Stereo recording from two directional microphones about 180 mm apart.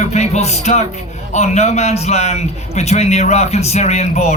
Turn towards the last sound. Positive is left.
turn(degrees=35)  # may be behind; listen again after turning